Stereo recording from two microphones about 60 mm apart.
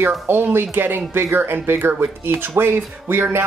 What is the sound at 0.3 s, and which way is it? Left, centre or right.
Speech, right.